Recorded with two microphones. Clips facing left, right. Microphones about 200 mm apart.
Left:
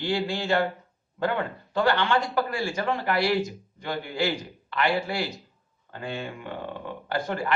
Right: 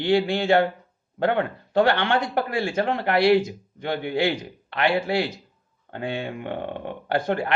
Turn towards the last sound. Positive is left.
turn(degrees=-60)  # may be behind; listen again after turning